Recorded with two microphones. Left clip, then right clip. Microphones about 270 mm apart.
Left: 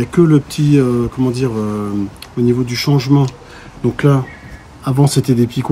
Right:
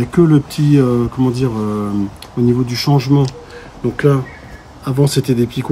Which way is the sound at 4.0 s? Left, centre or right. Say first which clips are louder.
Right 2 dB; centre.